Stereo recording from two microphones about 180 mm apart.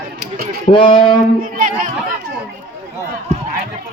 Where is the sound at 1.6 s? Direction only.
50° right (ahead or behind).